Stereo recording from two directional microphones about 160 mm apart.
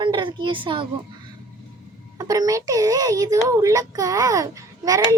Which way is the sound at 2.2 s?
20° right (ahead or behind).